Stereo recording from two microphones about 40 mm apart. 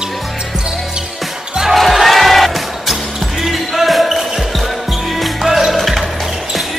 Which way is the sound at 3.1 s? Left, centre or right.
Centre.